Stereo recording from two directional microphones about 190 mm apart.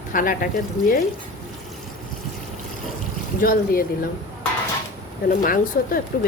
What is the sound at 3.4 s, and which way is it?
Speech, 50° left (ahead or behind).